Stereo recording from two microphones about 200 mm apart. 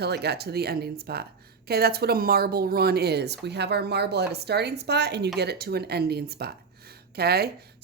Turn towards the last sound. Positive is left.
turn(degrees=-50)  # may be behind; listen again after turning